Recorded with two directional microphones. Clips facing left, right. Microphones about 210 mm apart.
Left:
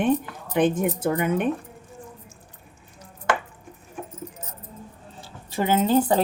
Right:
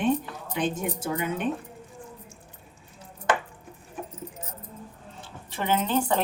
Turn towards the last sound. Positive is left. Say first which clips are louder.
# left 5 dB
turn(degrees=35)  # may be behind; listen again after turning